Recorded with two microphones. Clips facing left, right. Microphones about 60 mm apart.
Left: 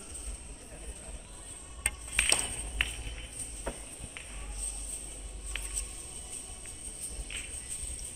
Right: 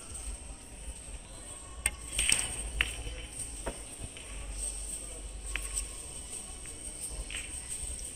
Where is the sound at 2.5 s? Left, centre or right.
Centre.